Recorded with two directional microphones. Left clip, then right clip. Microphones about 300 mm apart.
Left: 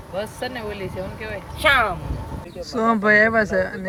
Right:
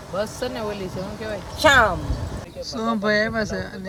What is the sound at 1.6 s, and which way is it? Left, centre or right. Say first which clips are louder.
Speech: right 2 dB; centre.